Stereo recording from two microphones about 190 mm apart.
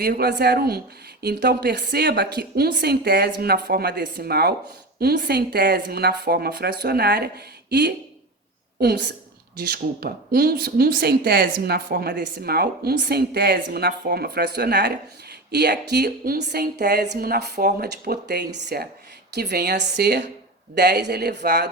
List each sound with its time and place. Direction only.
0.0 s speech: 60° right (ahead or behind)